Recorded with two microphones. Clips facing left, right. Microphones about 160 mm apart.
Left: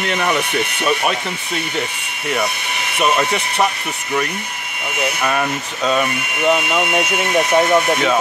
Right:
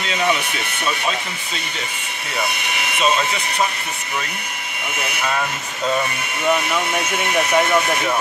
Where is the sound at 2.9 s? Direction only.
65° left (ahead or behind).